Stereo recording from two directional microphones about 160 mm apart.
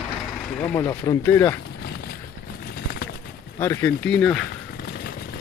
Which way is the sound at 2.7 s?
80° left.